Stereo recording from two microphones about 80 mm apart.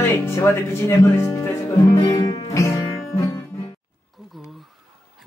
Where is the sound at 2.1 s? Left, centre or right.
Left.